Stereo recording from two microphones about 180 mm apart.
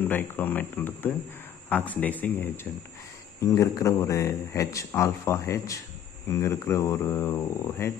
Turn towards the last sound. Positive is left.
turn(degrees=15)  # may be behind; listen again after turning